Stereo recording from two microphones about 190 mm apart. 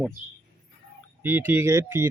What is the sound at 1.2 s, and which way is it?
Speech, 10° right (ahead or behind).